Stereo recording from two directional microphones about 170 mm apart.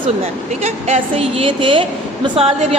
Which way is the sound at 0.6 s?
40° right (ahead or behind).